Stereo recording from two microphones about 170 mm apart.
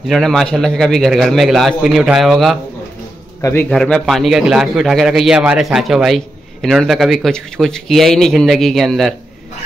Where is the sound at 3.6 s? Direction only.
5° left (ahead or behind).